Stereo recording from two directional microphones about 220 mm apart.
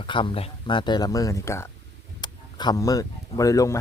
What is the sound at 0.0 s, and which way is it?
Speech, 20° left (ahead or behind).